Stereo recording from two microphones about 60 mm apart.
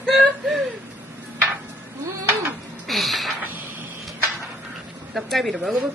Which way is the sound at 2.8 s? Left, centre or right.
Centre.